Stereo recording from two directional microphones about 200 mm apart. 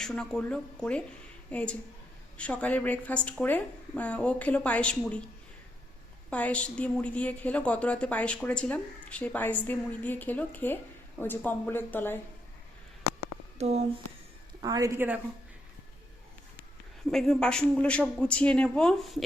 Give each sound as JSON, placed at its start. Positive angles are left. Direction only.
{"t": 0.0, "sound": "a woman's voice", "side_deg": 0}
{"t": 6.3, "sound": "a woman's voice", "side_deg": 5}
{"t": 13.6, "sound": "speech", "side_deg": -35}
{"t": 14.6, "sound": "speech", "side_deg": -15}
{"t": 17.1, "sound": "speech", "side_deg": 0}